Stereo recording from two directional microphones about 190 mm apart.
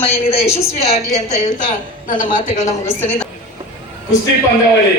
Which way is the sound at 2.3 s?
40° left (ahead or behind).